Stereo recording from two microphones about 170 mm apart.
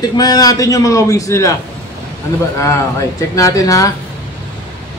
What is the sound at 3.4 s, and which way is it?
Speech, 20° left (ahead or behind).